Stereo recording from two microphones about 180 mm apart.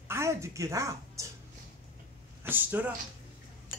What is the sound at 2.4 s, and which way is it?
Speech, 10° right (ahead or behind).